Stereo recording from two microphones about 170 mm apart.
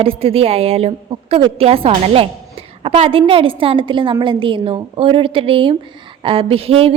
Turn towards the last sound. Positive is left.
turn(degrees=-35)  # may be behind; listen again after turning